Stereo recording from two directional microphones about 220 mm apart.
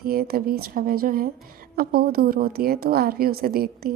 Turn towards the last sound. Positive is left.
turn(degrees=-45)  # may be behind; listen again after turning